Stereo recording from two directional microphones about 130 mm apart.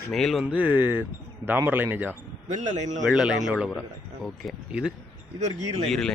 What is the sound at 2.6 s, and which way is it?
Speech, 60° right (ahead or behind).